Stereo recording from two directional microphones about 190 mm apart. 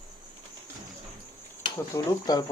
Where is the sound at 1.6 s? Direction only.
20° left (ahead or behind).